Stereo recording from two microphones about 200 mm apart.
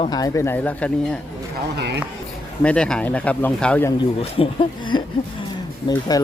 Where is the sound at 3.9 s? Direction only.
25° left (ahead or behind).